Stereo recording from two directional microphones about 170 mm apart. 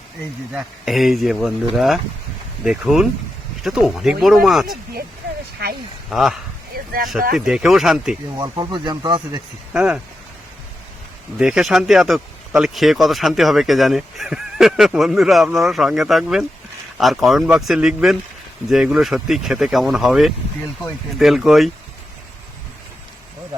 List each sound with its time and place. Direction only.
0.5 s speech: centre (ahead or behind)
6.1 s speech: centre (ahead or behind)
6.7 s a sound: 60° right (ahead or behind)
7.3 s speech: 5° right (ahead or behind)
8.4 s speech: 25° right (ahead or behind)
9.7 s speech: 5° right (ahead or behind)
11.3 s speech: 5° right (ahead or behind)